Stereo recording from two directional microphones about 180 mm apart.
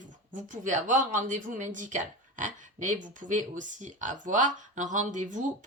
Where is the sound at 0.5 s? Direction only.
45° right (ahead or behind).